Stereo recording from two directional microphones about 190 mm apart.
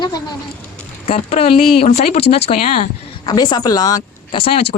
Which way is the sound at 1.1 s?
35° left (ahead or behind).